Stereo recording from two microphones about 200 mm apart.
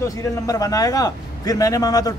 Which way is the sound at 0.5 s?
15° left (ahead or behind).